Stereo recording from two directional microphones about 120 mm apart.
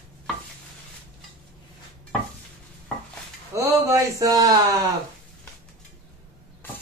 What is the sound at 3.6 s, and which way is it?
Speech, 25° right (ahead or behind).